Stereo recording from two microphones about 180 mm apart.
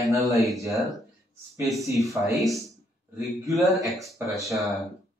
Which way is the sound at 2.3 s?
Centre (ahead or behind).